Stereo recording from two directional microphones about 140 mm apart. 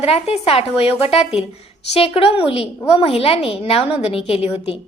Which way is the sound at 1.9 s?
45° left (ahead or behind).